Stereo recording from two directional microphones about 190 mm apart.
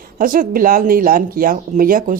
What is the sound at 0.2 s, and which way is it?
Speech, 50° right (ahead or behind).